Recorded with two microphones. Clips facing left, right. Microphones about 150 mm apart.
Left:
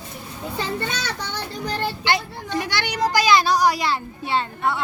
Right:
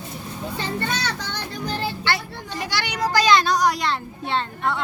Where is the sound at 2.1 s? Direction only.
15° left (ahead or behind).